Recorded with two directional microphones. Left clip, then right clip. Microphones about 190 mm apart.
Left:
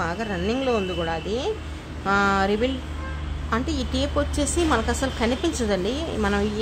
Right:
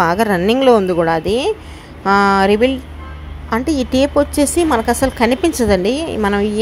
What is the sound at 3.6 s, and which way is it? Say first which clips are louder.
Speech: right 11 dB; 90° right.